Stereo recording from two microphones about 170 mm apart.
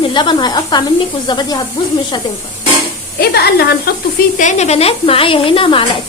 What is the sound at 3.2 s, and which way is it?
Speech, 70° left (ahead or behind).